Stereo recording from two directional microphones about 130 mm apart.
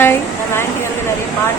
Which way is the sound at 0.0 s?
15° left (ahead or behind).